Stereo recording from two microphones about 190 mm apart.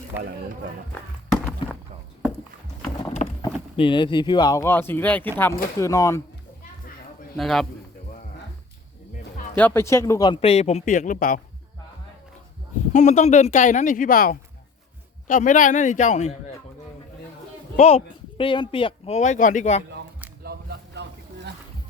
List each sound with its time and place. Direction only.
3.4 s speech: 25° left (ahead or behind)
7.3 s a man's voice: centre (ahead or behind)
9.6 s speech: 10° left (ahead or behind); by 11.3 s 45° left (ahead or behind)
12.9 s speech: 40° left (ahead or behind)
17.7 s speech: 35° left (ahead or behind)
20.4 s a sound: 60° right (ahead or behind)